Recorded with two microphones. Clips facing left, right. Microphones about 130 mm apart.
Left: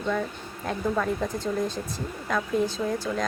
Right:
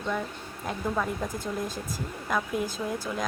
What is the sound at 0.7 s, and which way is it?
Speech, 5° right (ahead or behind).